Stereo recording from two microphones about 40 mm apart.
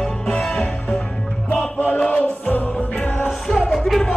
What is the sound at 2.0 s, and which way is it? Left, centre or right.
Music, left.